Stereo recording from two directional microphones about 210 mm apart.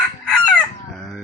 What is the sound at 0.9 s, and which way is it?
Crow, centre (ahead or behind).